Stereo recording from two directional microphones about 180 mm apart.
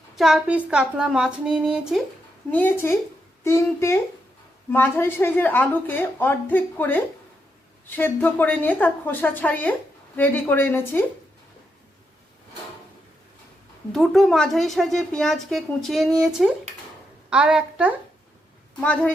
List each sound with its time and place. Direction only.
0.2 s a woman's voice: 5° right (ahead or behind)
2.5 s a woman's voice: 10° left (ahead or behind)
13.9 s a woman's voice: centre (ahead or behind)
18.8 s a woman's voice: 5° left (ahead or behind)